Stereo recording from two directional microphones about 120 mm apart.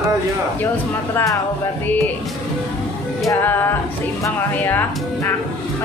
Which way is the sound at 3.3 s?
15° left (ahead or behind).